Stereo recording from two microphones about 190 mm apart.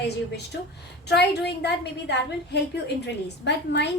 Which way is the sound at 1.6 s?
60° left (ahead or behind).